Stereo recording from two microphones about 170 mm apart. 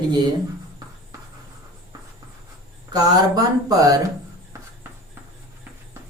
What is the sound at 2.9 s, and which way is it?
Speech, 20° right (ahead or behind).